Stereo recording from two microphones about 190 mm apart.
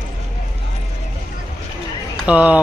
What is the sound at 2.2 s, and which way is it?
Speech, 5° right (ahead or behind).